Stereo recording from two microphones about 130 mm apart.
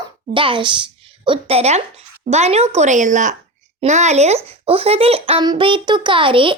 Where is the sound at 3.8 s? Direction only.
60° right (ahead or behind).